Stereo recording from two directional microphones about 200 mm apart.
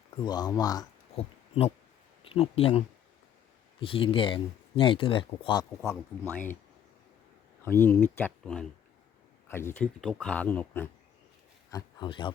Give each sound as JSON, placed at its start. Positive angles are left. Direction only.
{"t": 0.3, "sound": "speech", "side_deg": 20}
{"t": 1.1, "sound": "a sound", "side_deg": 30}
{"t": 2.2, "sound": "speech", "side_deg": 30}
{"t": 7.6, "sound": "speech", "side_deg": 10}
{"t": 11.7, "sound": "speech", "side_deg": 25}